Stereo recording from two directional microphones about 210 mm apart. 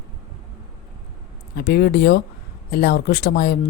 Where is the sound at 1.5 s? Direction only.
50° left (ahead or behind).